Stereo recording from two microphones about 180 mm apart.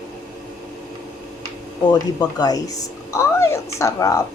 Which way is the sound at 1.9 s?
20° left (ahead or behind).